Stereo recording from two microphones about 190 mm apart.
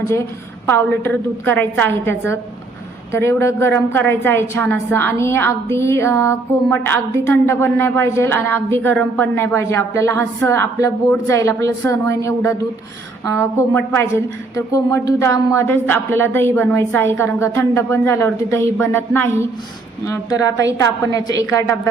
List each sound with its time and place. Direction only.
0.0 s a woman's voice: 15° left (ahead or behind)